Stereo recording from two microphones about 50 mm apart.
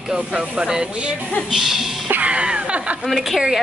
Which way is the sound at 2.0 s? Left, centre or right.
Right.